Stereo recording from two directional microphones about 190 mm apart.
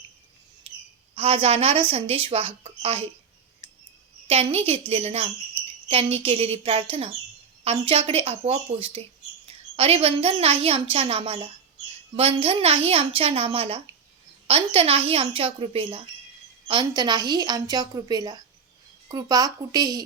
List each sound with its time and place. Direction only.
0.7 s a sound: 30° right (ahead or behind)
1.1 s a woman's voice: 30° right (ahead or behind)
4.3 s a woman's voice: 30° right (ahead or behind)